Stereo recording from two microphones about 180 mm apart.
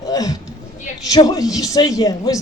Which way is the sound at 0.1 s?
20° left (ahead or behind).